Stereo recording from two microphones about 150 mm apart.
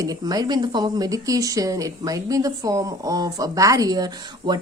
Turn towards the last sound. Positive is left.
turn(degrees=-30)  # may be behind; listen again after turning